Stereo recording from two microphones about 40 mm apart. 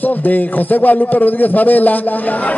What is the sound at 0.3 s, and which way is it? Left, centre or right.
A man's voice, left.